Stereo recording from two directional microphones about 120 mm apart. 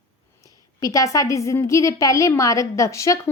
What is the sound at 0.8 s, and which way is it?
A woman's voice, 25° left (ahead or behind).